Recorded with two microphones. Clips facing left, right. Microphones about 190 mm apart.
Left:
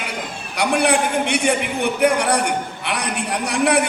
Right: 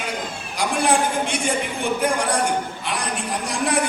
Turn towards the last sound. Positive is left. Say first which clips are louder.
# left 4 dB
turn(degrees=65)  # may be behind; listen again after turning